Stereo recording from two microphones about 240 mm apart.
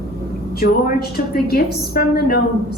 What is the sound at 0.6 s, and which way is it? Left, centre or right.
A woman's voice, left.